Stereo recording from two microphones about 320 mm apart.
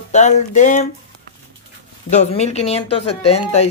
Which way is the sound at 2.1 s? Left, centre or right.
Left.